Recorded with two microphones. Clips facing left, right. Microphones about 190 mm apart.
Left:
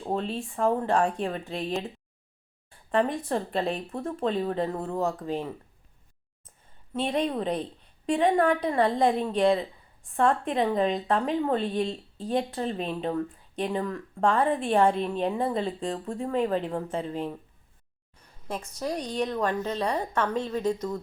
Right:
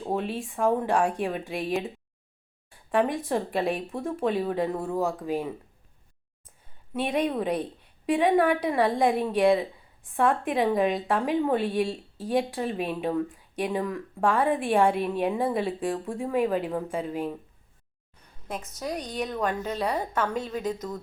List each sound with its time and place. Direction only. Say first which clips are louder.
0.0 s a woman's voice: right 1 dB; 10° right (ahead or behind)
2.9 s a woman's voice: right 1 dB; 15° right (ahead or behind)
4.9 s a woman's voice: right 1 dB; centre (ahead or behind)
5.2 s a woman's voice: right 2 dB; 10° right (ahead or behind)
6.9 s a woman's voice: right 1 dB; 15° right (ahead or behind)
18.4 s a woman's voice: left 1 dB; centre (ahead or behind)